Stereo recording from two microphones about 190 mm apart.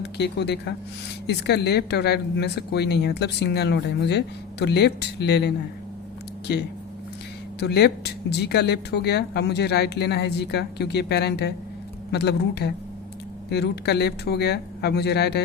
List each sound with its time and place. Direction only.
0.0 s speech: 60° left (ahead or behind)
7.6 s speech: 60° left (ahead or behind)